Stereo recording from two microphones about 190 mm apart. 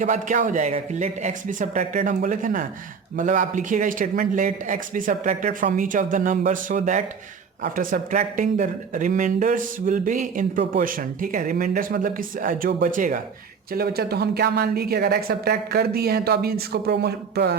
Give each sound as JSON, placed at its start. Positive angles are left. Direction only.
{"t": 0.0, "sound": "speech", "side_deg": -40}
{"t": 13.7, "sound": "a woman's voice", "side_deg": -55}